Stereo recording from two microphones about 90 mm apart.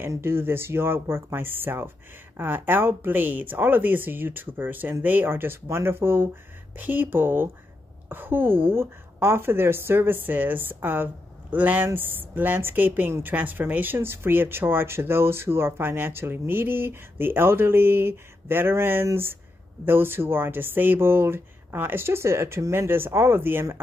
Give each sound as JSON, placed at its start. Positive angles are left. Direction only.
{"t": 0.0, "sound": "a woman's voice", "side_deg": -25}